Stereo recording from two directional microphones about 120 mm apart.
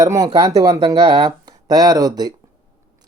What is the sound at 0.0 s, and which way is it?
Speech, 30° right (ahead or behind).